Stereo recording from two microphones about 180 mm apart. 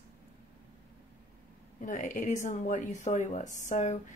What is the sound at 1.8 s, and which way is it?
Speech, 45° left (ahead or behind).